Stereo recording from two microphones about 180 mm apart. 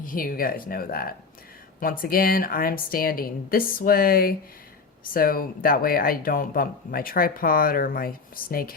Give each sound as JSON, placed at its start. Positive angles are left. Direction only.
{"t": 0.0, "sound": "speech", "side_deg": 50}